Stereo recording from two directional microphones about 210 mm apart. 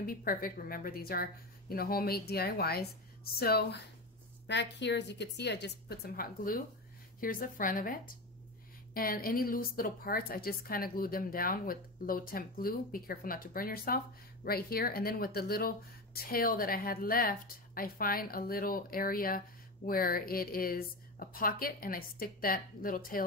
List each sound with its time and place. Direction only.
0.0 s a woman's voice: 45° left (ahead or behind)